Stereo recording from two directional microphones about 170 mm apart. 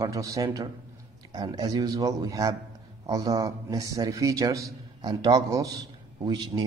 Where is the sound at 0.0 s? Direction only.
20° right (ahead or behind).